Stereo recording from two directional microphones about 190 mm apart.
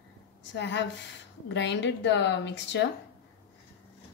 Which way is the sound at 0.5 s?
65° left (ahead or behind).